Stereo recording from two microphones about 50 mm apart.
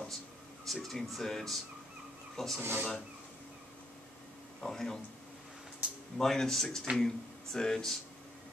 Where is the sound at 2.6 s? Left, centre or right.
Right.